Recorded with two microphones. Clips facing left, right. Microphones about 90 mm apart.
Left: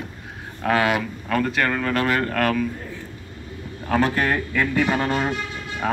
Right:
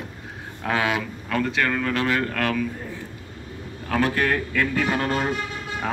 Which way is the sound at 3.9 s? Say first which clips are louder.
Left 2 dB; 15° left (ahead or behind).